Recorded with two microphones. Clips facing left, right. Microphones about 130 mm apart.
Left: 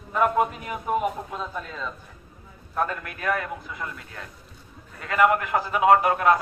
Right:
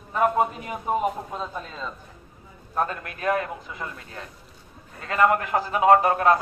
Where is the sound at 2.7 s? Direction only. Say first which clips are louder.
Even; 35° right (ahead or behind).